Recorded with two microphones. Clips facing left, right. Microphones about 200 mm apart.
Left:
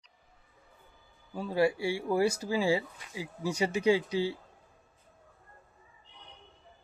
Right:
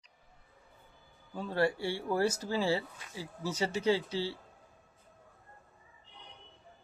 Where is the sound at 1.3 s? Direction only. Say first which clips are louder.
Left 3 dB; 10° left (ahead or behind).